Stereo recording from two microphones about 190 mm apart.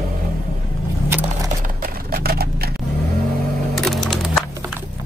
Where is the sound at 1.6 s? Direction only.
45° right (ahead or behind).